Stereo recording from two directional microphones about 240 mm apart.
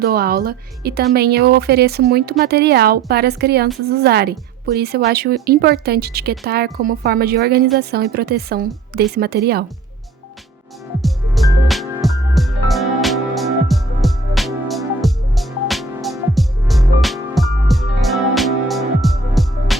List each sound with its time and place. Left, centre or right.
0.0 s a woman's voice: right
11.0 s music: centre